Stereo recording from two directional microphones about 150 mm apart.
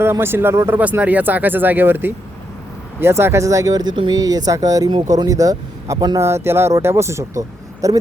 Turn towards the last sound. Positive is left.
turn(degrees=-20)  # may be behind; listen again after turning